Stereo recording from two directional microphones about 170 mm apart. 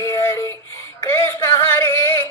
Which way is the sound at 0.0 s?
15° left (ahead or behind).